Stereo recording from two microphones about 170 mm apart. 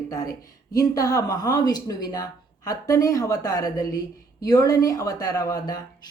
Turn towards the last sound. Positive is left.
turn(degrees=20)  # may be behind; listen again after turning